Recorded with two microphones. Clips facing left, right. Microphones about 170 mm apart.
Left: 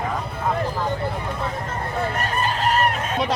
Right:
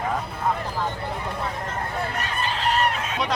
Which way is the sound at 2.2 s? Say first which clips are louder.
Left 4 dB; 45° left (ahead or behind).